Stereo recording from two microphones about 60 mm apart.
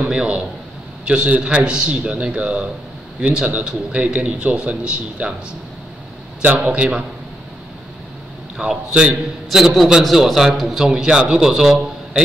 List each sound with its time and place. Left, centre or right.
0.1 s a man's voice: centre
6.4 s a man's voice: right
8.5 s a man's voice: centre